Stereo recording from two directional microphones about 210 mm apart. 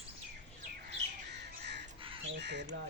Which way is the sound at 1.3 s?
55° right (ahead or behind).